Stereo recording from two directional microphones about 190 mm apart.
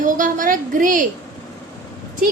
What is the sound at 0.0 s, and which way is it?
A woman's voice, 45° right (ahead or behind).